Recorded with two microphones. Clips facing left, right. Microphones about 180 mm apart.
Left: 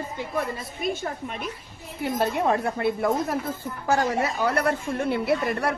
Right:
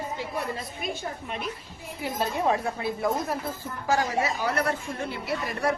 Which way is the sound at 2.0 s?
60° left (ahead or behind).